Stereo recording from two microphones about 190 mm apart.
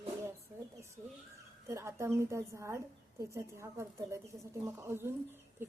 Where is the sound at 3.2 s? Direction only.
15° right (ahead or behind).